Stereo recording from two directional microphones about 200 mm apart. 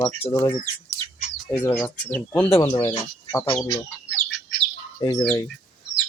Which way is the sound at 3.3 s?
15° left (ahead or behind).